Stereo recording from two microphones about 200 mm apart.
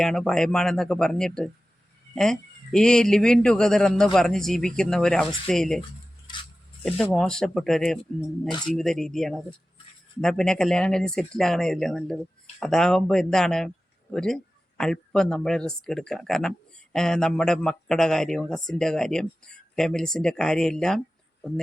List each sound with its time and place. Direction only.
0.0 s speech: centre (ahead or behind)
6.3 s a sound: 20° left (ahead or behind)
6.8 s speech: centre (ahead or behind)